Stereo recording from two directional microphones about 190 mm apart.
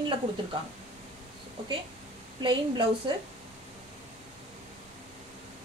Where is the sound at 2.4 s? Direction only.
25° right (ahead or behind).